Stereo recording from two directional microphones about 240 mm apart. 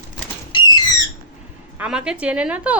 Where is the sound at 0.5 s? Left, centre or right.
Centre.